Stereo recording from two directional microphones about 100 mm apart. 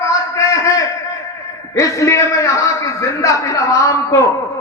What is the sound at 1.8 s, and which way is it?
A man's voice, 30° left (ahead or behind).